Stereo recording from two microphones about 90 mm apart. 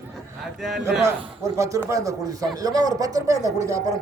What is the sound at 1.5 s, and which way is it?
Speech, 35° right (ahead or behind).